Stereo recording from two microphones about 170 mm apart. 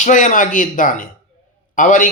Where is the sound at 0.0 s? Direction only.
50° left (ahead or behind).